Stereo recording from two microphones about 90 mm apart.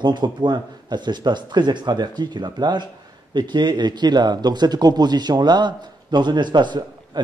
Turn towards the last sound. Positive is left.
turn(degrees=-60)  # may be behind; listen again after turning